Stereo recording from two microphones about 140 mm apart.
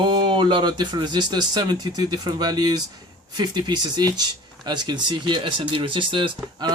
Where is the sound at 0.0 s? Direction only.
35° right (ahead or behind).